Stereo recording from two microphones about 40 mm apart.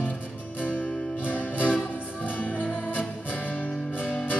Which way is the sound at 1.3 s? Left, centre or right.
Left.